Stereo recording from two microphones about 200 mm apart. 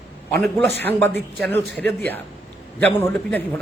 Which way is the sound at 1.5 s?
10° left (ahead or behind).